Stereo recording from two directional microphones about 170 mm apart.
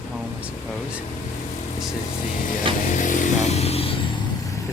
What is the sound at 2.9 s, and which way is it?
Motorcycle, 50° left (ahead or behind).